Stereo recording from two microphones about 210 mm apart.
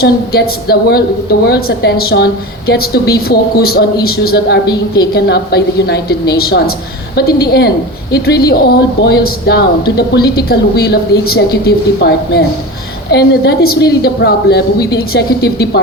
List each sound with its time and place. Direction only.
0.0 s a woman's voice: 50° left (ahead or behind)